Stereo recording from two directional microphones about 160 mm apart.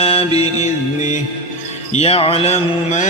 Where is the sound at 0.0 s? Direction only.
35° left (ahead or behind).